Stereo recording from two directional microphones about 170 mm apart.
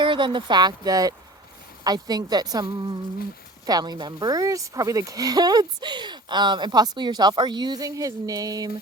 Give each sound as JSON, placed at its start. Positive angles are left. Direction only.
{"t": 0.0, "sound": "a woman's voice", "side_deg": -30}